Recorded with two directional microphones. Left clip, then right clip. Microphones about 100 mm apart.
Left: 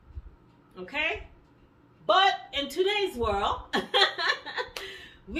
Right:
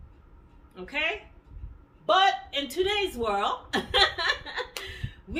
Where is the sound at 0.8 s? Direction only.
35° right (ahead or behind).